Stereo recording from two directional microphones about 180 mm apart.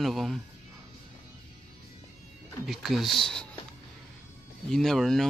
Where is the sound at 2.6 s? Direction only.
Centre (ahead or behind).